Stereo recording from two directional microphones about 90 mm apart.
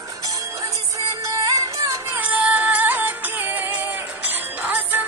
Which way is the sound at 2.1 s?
20° right (ahead or behind).